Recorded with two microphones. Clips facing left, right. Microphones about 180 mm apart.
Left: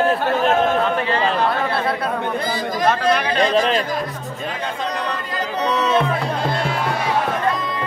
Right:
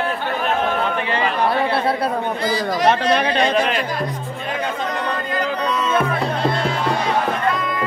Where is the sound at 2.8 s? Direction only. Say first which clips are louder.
Even; 20° right (ahead or behind).